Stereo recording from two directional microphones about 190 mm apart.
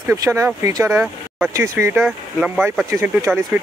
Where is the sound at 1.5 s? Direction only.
15° right (ahead or behind).